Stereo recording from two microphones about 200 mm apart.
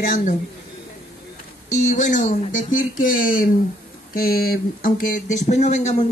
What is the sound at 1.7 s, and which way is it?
Speech, 35° left (ahead or behind).